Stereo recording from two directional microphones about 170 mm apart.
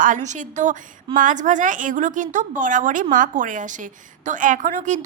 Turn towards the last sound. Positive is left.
turn(degrees=-45)  # may be behind; listen again after turning